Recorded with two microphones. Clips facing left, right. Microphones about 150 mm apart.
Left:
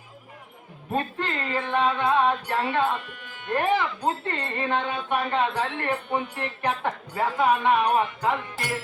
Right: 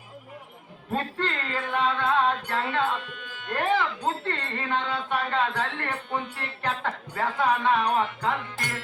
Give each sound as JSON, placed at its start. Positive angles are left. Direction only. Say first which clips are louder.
{"t": 0.9, "sound": "speech", "louder": "left 1 dB", "side_deg": 20}